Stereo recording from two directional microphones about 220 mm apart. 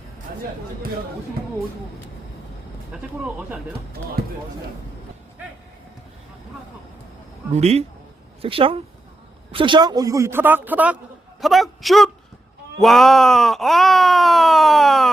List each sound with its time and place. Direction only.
2.9 s speech: 5° right (ahead or behind)
7.5 s a man's voice: 30° right (ahead or behind); by 15.1 s centre (ahead or behind)